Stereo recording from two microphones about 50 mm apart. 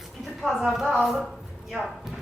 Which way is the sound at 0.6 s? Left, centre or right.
Centre.